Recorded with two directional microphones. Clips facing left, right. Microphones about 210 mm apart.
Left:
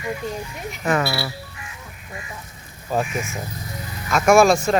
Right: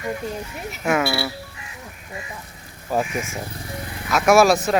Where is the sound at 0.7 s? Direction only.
10° right (ahead or behind).